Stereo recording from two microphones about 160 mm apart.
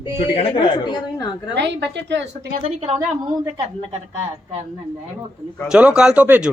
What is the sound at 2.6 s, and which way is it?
Speech, 40° right (ahead or behind).